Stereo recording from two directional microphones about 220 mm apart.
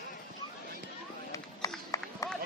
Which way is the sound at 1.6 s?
15° left (ahead or behind).